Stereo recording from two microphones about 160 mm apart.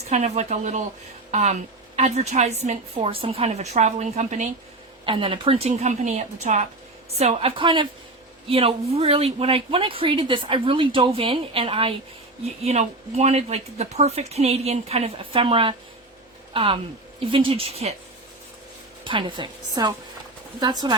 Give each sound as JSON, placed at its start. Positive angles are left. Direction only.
{"t": 0.1, "sound": "a woman's voice", "side_deg": -45}
{"t": 5.0, "sound": "a woman's voice", "side_deg": -35}
{"t": 19.0, "sound": "a woman's voice", "side_deg": -30}